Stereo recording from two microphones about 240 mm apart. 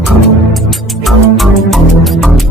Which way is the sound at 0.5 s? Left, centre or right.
Centre.